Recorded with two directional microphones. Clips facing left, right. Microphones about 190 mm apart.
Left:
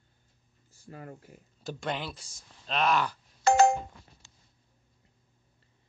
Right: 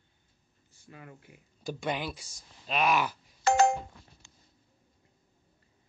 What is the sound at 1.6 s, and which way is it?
Speech, centre (ahead or behind).